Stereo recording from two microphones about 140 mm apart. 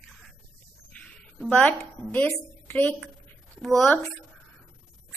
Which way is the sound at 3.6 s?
Centre (ahead or behind).